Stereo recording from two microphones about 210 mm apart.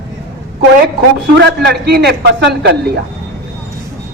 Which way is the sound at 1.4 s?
50° right (ahead or behind).